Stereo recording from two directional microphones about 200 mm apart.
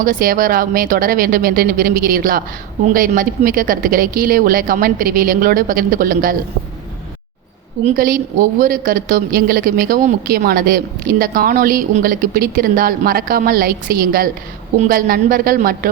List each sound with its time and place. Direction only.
0.0 s a woman's voice: 45° right (ahead or behind)
7.9 s a woman's voice: 45° right (ahead or behind)